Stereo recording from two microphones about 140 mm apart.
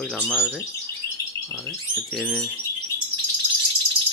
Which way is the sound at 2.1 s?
Centre (ahead or behind).